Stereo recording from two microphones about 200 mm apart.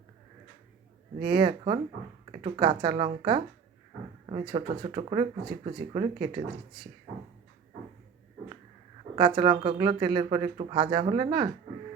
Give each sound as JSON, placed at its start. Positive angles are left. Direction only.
{"t": 1.3, "sound": "speech", "side_deg": -25}
{"t": 9.1, "sound": "speech", "side_deg": -25}